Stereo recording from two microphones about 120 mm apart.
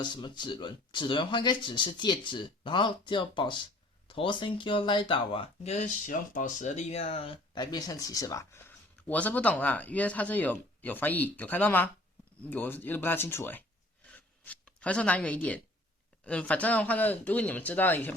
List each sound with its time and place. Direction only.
0.0 s speech: 40° left (ahead or behind)
5.7 s speech: 85° left; by 7.3 s 50° left (ahead or behind)
7.5 s speech: 35° left (ahead or behind); by 18.1 s 15° left (ahead or behind)